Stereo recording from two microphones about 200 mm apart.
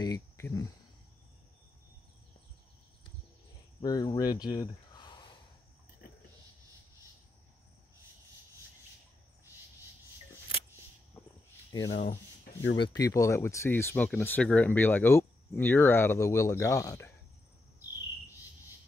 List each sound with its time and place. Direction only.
0.0 s a sound: 15° left (ahead or behind)
3.8 s speech: 20° left (ahead or behind)
11.9 s speech: 35° left (ahead or behind); by 17.1 s 15° left (ahead or behind)